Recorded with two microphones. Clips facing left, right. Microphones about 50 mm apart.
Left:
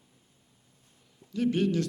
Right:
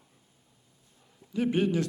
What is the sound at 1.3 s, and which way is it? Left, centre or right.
Speech, centre.